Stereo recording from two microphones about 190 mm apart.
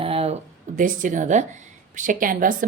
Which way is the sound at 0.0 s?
30° right (ahead or behind).